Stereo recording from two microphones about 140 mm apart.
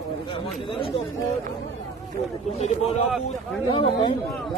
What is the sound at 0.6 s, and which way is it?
Chatter, 40° left (ahead or behind).